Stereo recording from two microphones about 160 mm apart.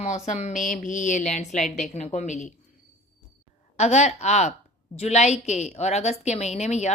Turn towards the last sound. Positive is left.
turn(degrees=45)  # may be behind; listen again after turning